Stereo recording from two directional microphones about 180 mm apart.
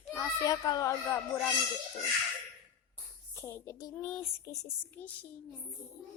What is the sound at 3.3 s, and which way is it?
Speech, 15° left (ahead or behind).